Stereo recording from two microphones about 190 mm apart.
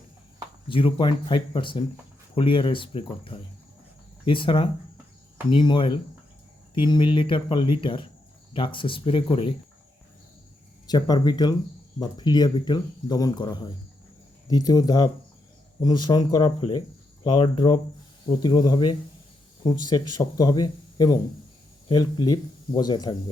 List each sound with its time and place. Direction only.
0.7 s speech: 25° left (ahead or behind)
10.8 s speech: 20° left (ahead or behind)